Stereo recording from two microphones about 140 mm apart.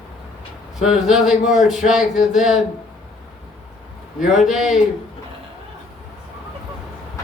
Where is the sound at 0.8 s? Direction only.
5° right (ahead or behind).